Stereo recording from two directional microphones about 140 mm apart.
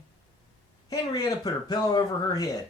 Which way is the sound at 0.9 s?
25° left (ahead or behind).